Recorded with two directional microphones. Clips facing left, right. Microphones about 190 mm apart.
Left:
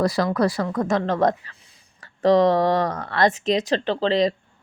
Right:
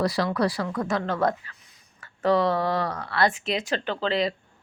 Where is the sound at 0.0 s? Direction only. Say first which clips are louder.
Left 4 dB; 45° left (ahead or behind).